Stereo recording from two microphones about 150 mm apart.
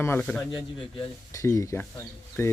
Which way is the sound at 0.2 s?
5° left (ahead or behind).